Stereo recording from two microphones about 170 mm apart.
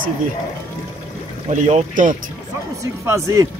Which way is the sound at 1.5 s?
45° right (ahead or behind).